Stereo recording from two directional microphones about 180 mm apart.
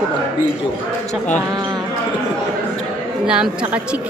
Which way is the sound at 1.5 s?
25° right (ahead or behind).